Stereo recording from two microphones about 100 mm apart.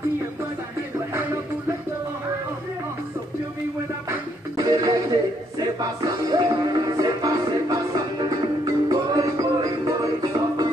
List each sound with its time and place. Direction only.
4.6 s music: 35° right (ahead or behind)